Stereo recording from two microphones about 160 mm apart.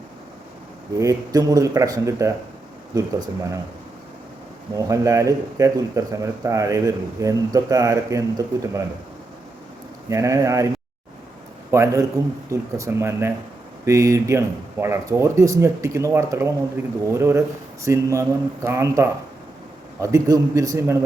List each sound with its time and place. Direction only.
0.9 s speech: 20° right (ahead or behind)
4.8 s speech: 20° right (ahead or behind)
10.1 s speech: 20° right (ahead or behind)
11.7 s speech: 20° right (ahead or behind)